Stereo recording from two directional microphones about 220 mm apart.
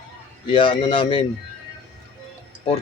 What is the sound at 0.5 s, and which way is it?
Speech, 20° left (ahead or behind).